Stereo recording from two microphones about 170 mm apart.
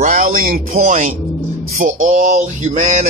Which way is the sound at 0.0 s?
50° right (ahead or behind).